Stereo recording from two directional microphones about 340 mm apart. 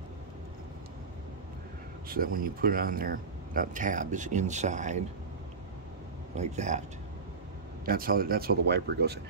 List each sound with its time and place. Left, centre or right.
2.0 s speech: right
6.3 s speech: centre
7.8 s speech: right